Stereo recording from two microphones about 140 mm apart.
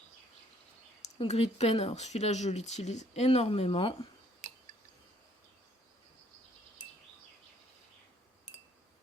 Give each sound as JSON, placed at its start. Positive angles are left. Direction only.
{"t": 1.2, "sound": "speech", "side_deg": 50}